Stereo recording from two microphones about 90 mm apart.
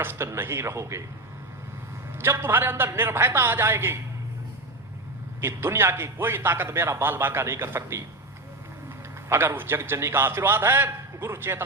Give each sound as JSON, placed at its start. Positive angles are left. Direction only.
{"t": 0.0, "sound": "a man's voice", "side_deg": -25}
{"t": 2.1, "sound": "a man's voice", "side_deg": -25}
{"t": 5.4, "sound": "a man's voice", "side_deg": -25}
{"t": 9.3, "sound": "a man's voice", "side_deg": -25}